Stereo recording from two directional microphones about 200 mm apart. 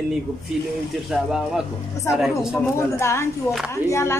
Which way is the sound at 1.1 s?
Centre (ahead or behind).